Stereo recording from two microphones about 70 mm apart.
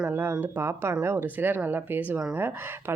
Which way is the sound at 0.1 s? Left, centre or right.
Right.